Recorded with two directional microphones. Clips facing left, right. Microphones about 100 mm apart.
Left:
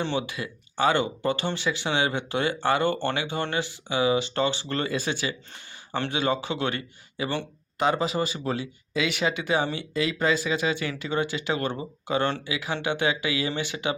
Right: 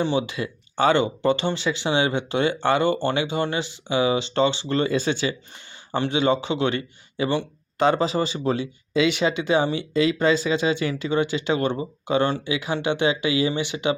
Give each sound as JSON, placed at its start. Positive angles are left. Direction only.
{"t": 0.0, "sound": "speech", "side_deg": -20}